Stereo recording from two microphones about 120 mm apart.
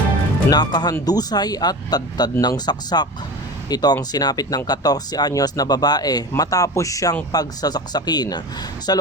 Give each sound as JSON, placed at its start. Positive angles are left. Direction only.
{"t": 0.5, "sound": "speech", "side_deg": 35}